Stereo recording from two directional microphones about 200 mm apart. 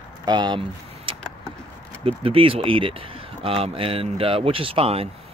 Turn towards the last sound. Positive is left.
turn(degrees=-30)  # may be behind; listen again after turning